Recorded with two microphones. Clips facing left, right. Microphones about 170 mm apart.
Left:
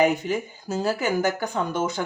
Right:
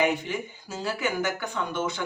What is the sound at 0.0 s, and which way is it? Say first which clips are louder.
Speech: left 4 dB; 40° left (ahead or behind).